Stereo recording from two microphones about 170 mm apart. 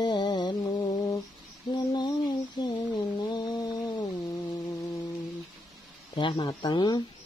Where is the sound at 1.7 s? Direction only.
25° left (ahead or behind).